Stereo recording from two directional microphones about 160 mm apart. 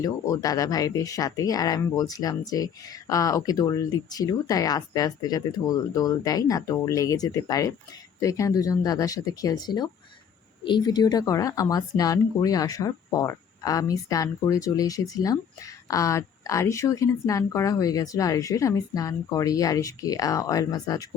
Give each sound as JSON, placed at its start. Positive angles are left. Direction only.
{"t": 0.0, "sound": "a woman's voice", "side_deg": 20}